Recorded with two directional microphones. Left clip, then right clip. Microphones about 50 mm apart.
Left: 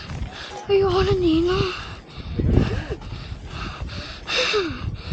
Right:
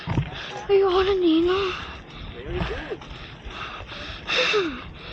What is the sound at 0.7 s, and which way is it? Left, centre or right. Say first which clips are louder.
A woman's voice: even; left.